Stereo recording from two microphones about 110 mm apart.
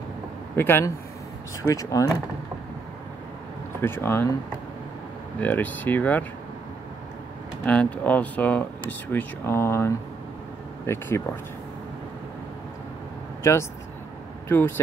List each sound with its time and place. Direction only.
0.6 s speech: 20° left (ahead or behind)
1.6 s speech: 30° left (ahead or behind)
3.8 s speech: 20° left (ahead or behind)
5.4 s speech: 15° left (ahead or behind)
7.6 s speech: 10° left (ahead or behind)
13.4 s speech: 25° left (ahead or behind)